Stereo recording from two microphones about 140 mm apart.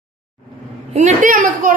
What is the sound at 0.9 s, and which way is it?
Speech, 55° right (ahead or behind).